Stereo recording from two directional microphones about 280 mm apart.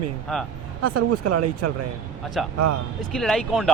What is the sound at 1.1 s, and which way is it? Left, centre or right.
Speech, right.